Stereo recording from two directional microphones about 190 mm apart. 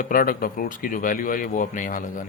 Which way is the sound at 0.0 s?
50° left (ahead or behind).